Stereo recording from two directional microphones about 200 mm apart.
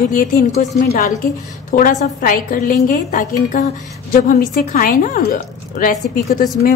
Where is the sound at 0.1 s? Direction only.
45° left (ahead or behind).